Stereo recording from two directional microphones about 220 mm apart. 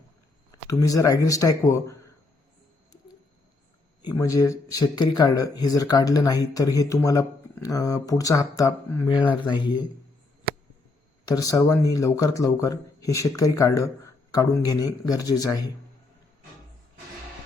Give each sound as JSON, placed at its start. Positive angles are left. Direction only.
{"t": 0.7, "sound": "speech", "side_deg": 15}
{"t": 4.0, "sound": "speech", "side_deg": 15}
{"t": 11.3, "sound": "speech", "side_deg": 15}